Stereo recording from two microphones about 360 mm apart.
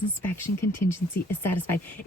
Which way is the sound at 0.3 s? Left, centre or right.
Centre.